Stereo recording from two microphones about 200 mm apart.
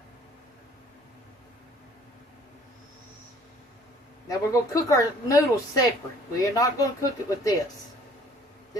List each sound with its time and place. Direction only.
4.3 s a woman's voice: 15° left (ahead or behind)